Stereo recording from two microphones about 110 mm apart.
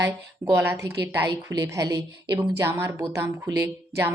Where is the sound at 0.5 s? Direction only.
20° right (ahead or behind).